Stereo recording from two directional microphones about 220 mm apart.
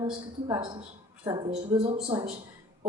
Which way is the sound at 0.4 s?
20° right (ahead or behind).